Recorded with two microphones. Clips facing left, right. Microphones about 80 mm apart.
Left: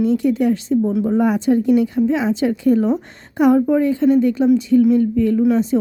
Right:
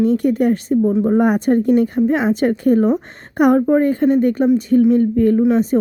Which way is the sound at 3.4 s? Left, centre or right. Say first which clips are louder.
Right 1 dB; right.